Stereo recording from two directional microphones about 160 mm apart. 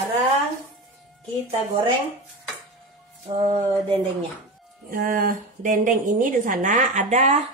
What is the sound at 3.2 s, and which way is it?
Music, 35° right (ahead or behind).